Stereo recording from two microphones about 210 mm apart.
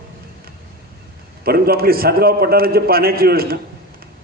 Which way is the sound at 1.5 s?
45° right (ahead or behind).